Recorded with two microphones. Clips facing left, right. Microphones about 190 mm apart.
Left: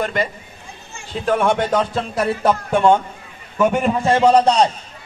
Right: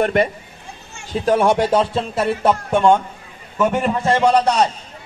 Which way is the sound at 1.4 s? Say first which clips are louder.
Right 1 dB; 10° right (ahead or behind).